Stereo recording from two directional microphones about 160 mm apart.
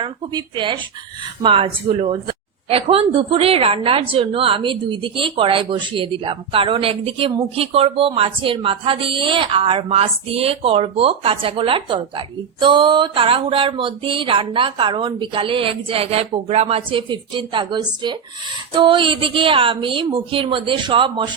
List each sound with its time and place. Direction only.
0.0 s a woman's voice: 30° right (ahead or behind)